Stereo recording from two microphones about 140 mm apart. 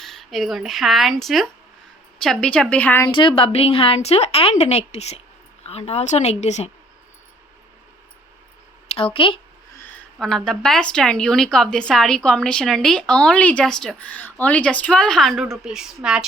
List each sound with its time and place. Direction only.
0.0 s speech: centre (ahead or behind)
3.1 s a woman's voice: 40° left (ahead or behind)
9.0 s speech: 45° left (ahead or behind)
9.7 s a sound: 15° left (ahead or behind)
10.2 s speech: 5° left (ahead or behind)